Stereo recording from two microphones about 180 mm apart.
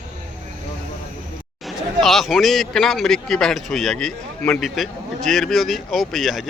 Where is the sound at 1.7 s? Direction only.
Centre (ahead or behind).